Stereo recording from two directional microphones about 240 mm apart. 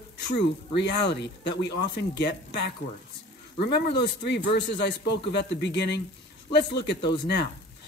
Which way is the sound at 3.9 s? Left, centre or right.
Left.